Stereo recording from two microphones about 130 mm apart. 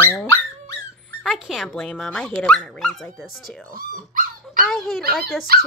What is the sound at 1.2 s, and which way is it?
Speech, centre (ahead or behind).